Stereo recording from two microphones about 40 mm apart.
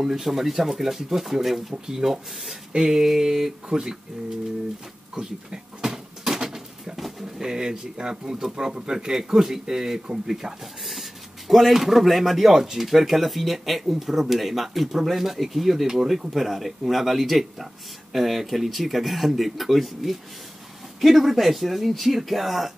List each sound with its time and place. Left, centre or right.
0.1 s speech: centre
3.6 s speech: right
5.1 s a sound: centre
7.0 s pigeon: centre
7.4 s speech: centre
16.3 s speech: centre